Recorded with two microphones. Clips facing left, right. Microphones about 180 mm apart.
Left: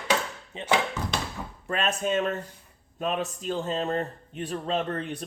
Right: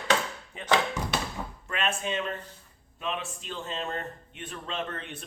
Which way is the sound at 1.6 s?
40° left (ahead or behind).